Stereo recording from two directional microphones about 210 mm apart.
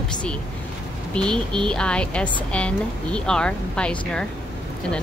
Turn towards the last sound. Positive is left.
turn(degrees=5)  # may be behind; listen again after turning